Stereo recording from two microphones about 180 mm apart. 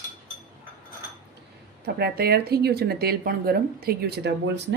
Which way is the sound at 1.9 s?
60° right (ahead or behind).